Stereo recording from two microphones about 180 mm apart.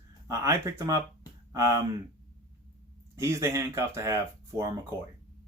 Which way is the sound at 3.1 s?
15° right (ahead or behind).